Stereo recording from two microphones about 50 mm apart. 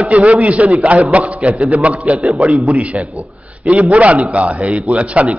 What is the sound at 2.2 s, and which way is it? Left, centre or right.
A man's voice, centre.